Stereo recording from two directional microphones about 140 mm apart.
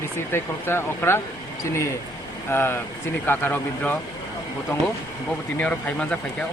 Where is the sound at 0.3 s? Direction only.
15° left (ahead or behind).